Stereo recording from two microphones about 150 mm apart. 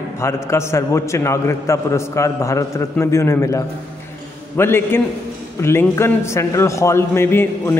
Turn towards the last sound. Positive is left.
turn(degrees=15)  # may be behind; listen again after turning